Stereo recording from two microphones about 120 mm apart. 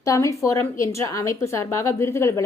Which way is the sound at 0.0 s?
25° left (ahead or behind).